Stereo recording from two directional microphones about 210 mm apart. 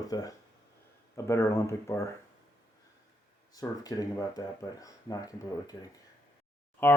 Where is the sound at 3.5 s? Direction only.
15° left (ahead or behind).